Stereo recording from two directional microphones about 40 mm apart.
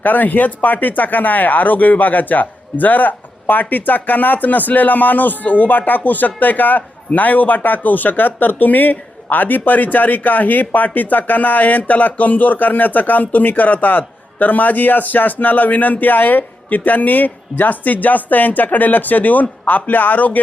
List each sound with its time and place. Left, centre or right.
0.0 s speech: left